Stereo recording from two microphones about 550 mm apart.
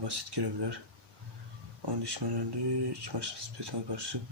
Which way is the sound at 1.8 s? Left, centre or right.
Right.